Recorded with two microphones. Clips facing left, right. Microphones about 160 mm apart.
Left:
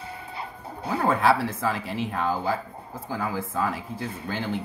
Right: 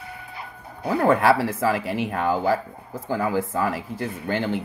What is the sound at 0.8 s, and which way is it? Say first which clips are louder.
Speech: right 4 dB; 70° right (ahead or behind).